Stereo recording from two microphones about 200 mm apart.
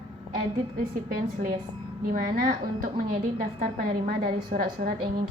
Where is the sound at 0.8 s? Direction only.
45° right (ahead or behind).